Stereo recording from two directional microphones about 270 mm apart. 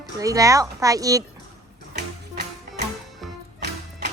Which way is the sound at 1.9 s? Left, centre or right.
Right.